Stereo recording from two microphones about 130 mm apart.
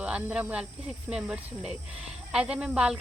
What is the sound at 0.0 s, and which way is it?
Speech, 10° right (ahead or behind).